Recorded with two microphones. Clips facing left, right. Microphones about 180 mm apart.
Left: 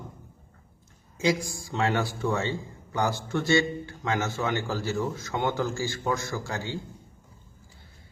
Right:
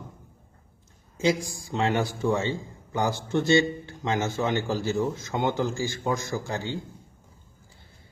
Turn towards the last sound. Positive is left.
turn(degrees=-20)  # may be behind; listen again after turning